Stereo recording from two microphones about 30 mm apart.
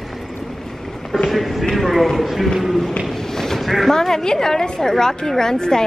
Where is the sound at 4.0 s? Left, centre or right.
Centre.